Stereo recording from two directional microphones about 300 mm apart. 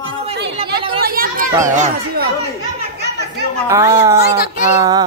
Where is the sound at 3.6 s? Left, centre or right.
Centre.